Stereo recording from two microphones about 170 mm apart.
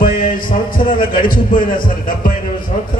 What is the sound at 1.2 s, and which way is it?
Speech, 30° left (ahead or behind).